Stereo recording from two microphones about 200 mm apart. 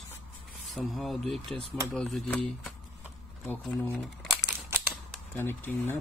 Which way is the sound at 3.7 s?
10° left (ahead or behind).